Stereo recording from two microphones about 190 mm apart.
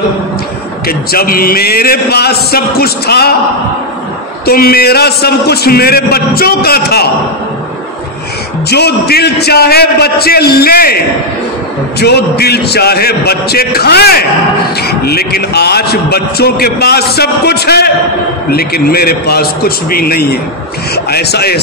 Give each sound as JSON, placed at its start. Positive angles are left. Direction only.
{"t": 0.8, "sound": "a man's voice", "side_deg": 50}
{"t": 4.5, "sound": "a man's voice", "side_deg": 50}
{"t": 8.6, "sound": "a man's voice", "side_deg": 60}
{"t": 12.0, "sound": "a man's voice", "side_deg": 60}